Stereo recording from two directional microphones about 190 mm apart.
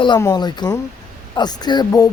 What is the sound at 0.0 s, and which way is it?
Speech, 20° left (ahead or behind).